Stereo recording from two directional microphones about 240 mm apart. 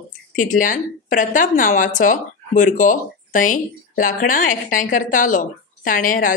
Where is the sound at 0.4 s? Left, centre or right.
Left.